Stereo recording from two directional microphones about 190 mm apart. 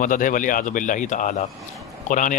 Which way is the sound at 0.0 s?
45° left (ahead or behind).